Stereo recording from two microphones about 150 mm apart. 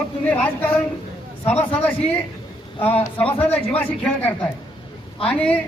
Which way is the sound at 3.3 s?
10° left (ahead or behind).